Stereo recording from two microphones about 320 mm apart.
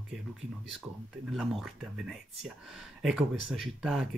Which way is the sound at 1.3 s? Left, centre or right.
Centre.